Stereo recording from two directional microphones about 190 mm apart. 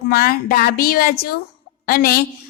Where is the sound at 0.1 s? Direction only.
50° left (ahead or behind).